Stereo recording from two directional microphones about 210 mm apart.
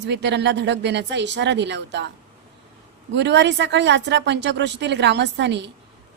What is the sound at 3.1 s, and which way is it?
A woman's voice, 55° right (ahead or behind).